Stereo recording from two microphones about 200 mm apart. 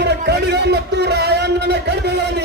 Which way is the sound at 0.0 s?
55° right (ahead or behind).